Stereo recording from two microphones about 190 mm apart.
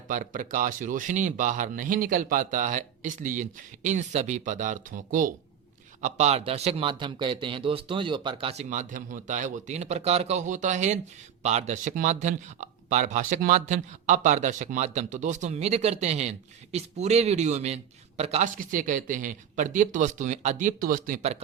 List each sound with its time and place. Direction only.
0.1 s speech: 45° right (ahead or behind)